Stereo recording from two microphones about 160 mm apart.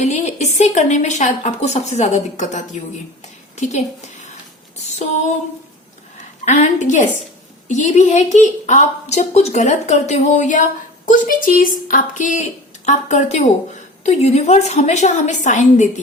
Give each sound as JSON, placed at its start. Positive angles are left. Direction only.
{"t": 0.0, "sound": "a woman's voice", "side_deg": 45}
{"t": 6.4, "sound": "a woman's voice", "side_deg": 50}